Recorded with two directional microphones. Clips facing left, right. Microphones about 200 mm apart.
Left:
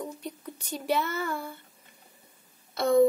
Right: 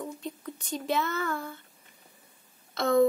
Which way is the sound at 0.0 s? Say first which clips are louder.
Even; 10° left (ahead or behind).